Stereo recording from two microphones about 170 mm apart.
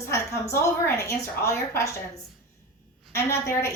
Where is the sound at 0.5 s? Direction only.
20° left (ahead or behind).